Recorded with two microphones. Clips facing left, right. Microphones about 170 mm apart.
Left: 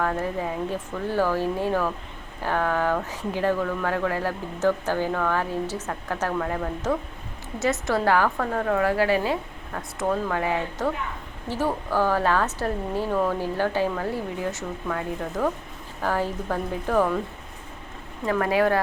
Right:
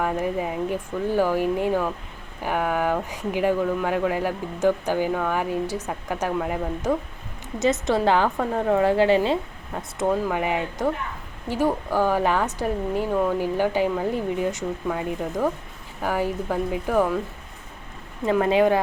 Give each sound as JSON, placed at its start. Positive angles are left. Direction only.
{"t": 0.0, "sound": "a woman's voice", "side_deg": -15}
{"t": 18.3, "sound": "a woman's voice", "side_deg": -20}